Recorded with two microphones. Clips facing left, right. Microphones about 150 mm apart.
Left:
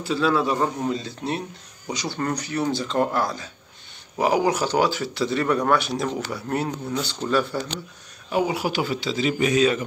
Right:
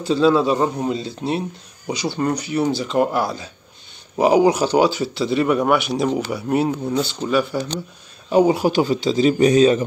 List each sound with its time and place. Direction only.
0.1 s speech: 20° right (ahead or behind)
8.3 s speech: 40° right (ahead or behind)